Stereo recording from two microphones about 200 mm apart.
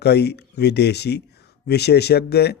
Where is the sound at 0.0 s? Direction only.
55° left (ahead or behind).